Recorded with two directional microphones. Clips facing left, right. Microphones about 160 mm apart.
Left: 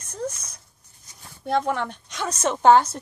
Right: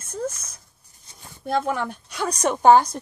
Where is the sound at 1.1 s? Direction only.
30° right (ahead or behind).